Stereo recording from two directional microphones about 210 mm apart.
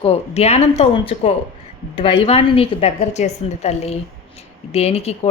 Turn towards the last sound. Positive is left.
turn(degrees=30)  # may be behind; listen again after turning